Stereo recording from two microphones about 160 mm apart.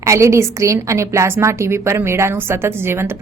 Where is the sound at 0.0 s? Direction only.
20° right (ahead or behind).